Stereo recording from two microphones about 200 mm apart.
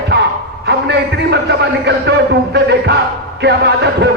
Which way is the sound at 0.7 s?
55° right (ahead or behind).